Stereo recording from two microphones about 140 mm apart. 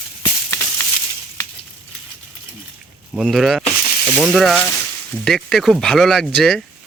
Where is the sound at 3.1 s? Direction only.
Centre (ahead or behind).